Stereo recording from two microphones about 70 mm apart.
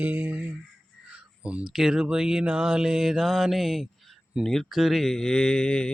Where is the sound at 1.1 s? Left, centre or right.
Centre.